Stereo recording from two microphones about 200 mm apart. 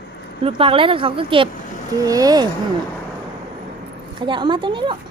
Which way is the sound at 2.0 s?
15° right (ahead or behind).